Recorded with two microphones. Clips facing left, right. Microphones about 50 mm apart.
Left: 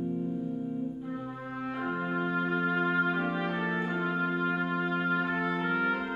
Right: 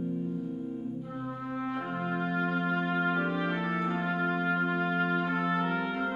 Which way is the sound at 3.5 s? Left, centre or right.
Left.